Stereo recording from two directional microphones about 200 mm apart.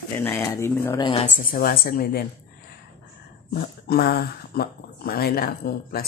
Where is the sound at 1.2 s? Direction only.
45° left (ahead or behind).